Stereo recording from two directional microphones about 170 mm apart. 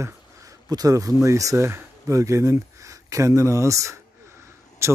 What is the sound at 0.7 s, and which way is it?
Speech, 20° right (ahead or behind).